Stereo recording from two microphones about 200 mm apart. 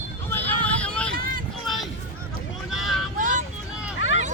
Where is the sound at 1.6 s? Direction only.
Centre (ahead or behind).